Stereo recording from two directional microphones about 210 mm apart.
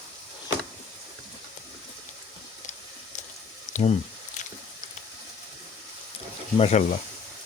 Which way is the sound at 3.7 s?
30° left (ahead or behind).